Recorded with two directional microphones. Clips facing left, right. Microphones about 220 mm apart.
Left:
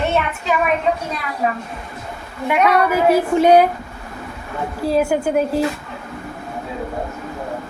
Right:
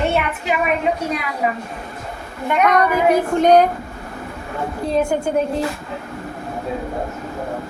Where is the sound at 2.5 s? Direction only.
10° left (ahead or behind).